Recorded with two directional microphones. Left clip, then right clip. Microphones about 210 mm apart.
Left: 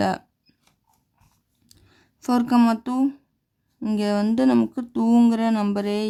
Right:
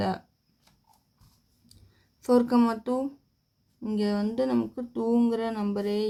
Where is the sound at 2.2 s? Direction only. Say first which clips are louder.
Left 2 dB; 35° left (ahead or behind).